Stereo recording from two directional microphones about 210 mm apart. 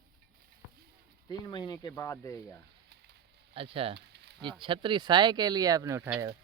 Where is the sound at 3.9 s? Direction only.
55° right (ahead or behind).